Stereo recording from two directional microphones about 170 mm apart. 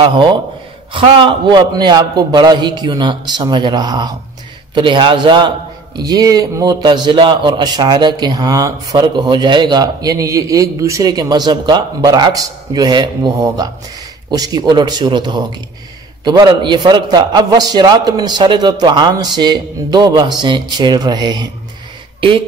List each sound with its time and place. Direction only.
0.0 s a man's voice: 25° right (ahead or behind)